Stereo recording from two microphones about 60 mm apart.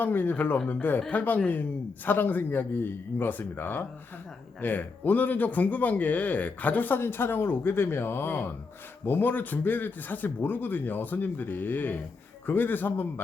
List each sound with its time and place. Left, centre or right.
0.0 s a man's voice: left